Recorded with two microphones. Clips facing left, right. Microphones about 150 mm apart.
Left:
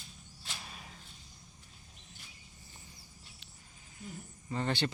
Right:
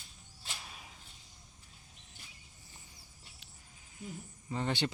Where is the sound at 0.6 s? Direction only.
5° right (ahead or behind).